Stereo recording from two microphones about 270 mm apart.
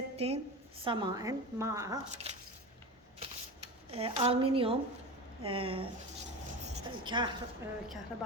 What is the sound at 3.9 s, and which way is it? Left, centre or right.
A woman's voice, right.